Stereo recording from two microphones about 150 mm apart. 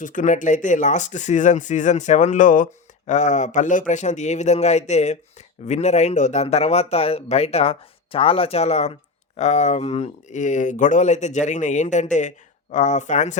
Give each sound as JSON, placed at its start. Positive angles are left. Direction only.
{"t": 0.0, "sound": "speech", "side_deg": 60}